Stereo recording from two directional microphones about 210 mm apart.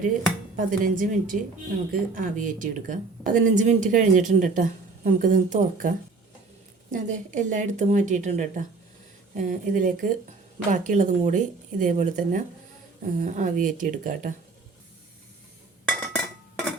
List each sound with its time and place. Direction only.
0.5 s a woman's voice: 40° right (ahead or behind)
6.9 s a woman's voice: 35° right (ahead or behind)
15.9 s chink: 5° left (ahead or behind)